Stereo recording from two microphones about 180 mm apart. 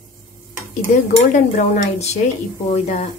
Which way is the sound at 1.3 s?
40° left (ahead or behind).